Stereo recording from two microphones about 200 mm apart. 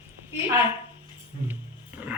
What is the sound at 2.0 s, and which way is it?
Speech, 10° right (ahead or behind).